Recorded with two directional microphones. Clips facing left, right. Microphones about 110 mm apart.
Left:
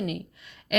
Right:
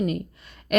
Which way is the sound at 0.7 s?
40° right (ahead or behind).